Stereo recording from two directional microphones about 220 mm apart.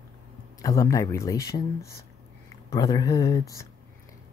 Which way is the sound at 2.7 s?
15° left (ahead or behind).